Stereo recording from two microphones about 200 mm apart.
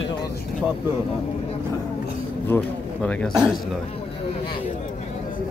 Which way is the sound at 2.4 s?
10° left (ahead or behind).